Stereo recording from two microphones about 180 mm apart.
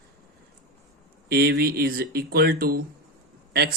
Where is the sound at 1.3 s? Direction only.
60° right (ahead or behind).